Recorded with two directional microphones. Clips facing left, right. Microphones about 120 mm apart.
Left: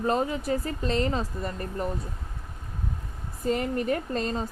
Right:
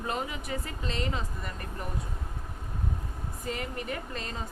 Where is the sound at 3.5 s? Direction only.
35° left (ahead or behind).